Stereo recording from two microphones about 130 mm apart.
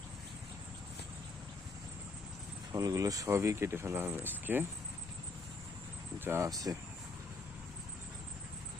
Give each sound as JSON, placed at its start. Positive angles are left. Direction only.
{"t": 2.7, "sound": "speech", "side_deg": -30}
{"t": 6.1, "sound": "speech", "side_deg": -15}